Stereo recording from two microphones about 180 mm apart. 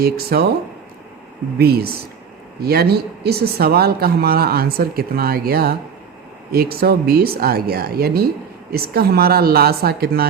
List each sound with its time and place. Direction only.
0.0 s speech: 60° right (ahead or behind)
1.5 s speech: 60° right (ahead or behind)